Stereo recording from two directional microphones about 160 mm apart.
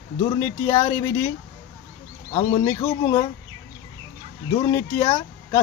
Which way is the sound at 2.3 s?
25° left (ahead or behind).